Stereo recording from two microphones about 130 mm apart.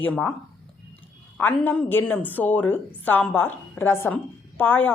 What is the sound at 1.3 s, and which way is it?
A woman's voice, 15° left (ahead or behind).